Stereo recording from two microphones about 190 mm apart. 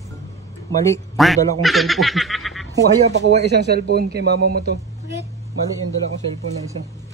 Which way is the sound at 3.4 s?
60° right (ahead or behind).